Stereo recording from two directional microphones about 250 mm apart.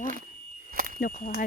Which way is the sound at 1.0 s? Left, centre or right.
Left.